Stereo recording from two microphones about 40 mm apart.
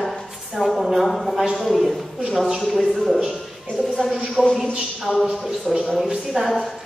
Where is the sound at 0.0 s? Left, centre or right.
Centre.